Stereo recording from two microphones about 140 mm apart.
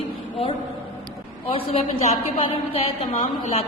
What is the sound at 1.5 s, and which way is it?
A man's voice, 45° left (ahead or behind).